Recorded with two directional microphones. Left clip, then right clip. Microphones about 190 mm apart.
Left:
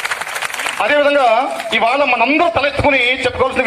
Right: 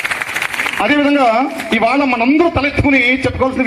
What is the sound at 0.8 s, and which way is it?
A man's voice, 35° right (ahead or behind).